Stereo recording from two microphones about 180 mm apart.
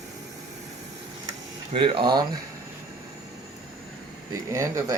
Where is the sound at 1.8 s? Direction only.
25° right (ahead or behind).